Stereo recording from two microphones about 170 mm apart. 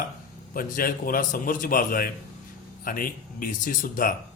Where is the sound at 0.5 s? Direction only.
55° left (ahead or behind).